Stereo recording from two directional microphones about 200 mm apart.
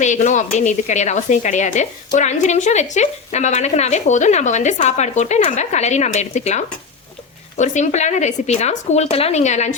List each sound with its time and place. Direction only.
0.0 s a woman's voice: 35° left (ahead or behind)